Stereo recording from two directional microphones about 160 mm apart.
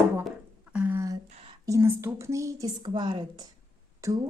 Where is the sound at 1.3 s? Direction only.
35° right (ahead or behind).